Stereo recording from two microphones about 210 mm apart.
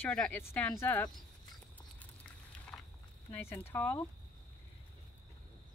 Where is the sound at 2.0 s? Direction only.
5° left (ahead or behind).